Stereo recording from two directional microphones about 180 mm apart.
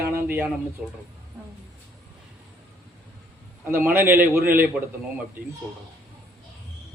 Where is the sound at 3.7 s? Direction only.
10° right (ahead or behind).